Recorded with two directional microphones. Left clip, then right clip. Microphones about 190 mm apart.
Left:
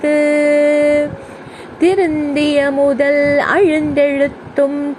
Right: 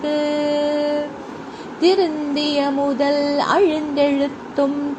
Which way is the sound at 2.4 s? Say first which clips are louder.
Left 7 dB; 40° left (ahead or behind).